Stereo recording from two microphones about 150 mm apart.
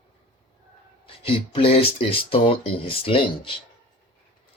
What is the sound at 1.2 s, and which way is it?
Speech, 40° left (ahead or behind).